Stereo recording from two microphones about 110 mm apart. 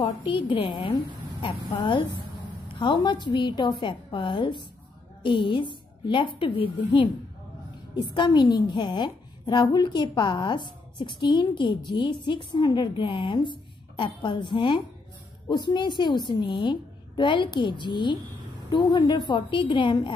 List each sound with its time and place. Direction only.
0.3 s a woman's voice: 50° left (ahead or behind)